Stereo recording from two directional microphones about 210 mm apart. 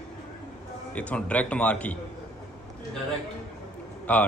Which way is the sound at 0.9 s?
5° left (ahead or behind).